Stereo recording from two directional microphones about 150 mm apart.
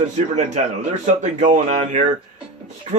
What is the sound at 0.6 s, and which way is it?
Speech, 50° right (ahead or behind).